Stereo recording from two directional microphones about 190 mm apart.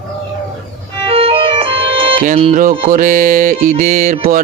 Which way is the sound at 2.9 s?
45° right (ahead or behind).